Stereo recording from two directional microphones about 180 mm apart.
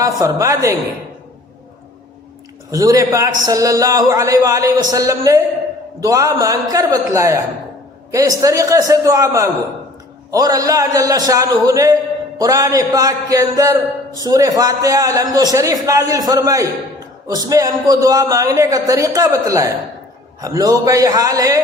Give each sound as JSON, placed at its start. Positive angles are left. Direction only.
{"t": 0.0, "sound": "a man's voice", "side_deg": -20}
{"t": 2.7, "sound": "a man's voice", "side_deg": -20}